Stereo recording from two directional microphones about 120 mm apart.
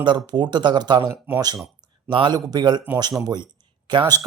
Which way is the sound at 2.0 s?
40° right (ahead or behind).